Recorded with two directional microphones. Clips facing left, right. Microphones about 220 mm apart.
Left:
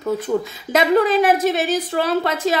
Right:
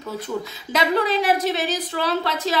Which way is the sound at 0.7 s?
50° left (ahead or behind).